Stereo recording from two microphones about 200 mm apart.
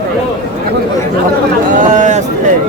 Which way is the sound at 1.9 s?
40° right (ahead or behind).